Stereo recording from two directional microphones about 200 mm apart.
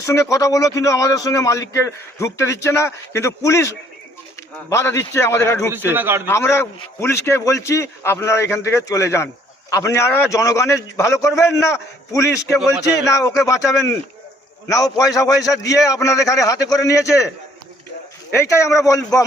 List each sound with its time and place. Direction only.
0.0 s a man's voice: 15° left (ahead or behind)
5.7 s a man's voice: 10° right (ahead or behind)
6.2 s a man's voice: 10° left (ahead or behind)
18.3 s a man's voice: 15° left (ahead or behind)